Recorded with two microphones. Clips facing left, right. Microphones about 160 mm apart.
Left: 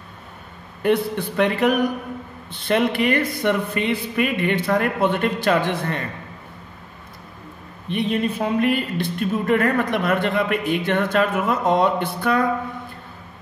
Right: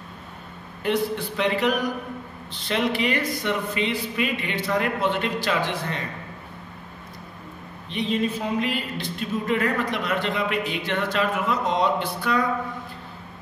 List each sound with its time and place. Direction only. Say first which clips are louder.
0.8 s a man's voice: left 4 dB; 55° left (ahead or behind)
7.9 s speech: left 3 dB; 55° left (ahead or behind)